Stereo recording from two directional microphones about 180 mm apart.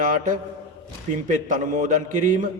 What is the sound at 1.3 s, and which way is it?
Speech, 45° right (ahead or behind).